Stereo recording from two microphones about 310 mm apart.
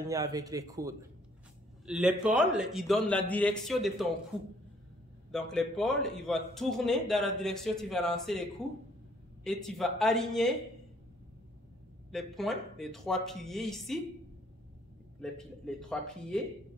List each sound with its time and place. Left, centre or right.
0.1 s a man's voice: centre
5.3 s a man's voice: centre
12.1 s a man's voice: centre
15.1 s a man's voice: centre